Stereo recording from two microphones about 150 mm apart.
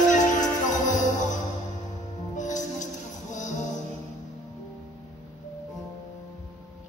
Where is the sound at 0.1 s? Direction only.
55° left (ahead or behind).